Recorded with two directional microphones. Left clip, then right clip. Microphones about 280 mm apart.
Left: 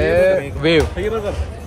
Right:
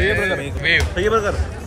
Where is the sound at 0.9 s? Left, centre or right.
Right.